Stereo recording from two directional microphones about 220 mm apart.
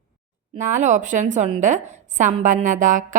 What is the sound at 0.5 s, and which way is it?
A woman's voice, 35° right (ahead or behind).